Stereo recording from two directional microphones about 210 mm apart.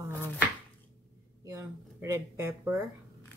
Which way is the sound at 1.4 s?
15° right (ahead or behind).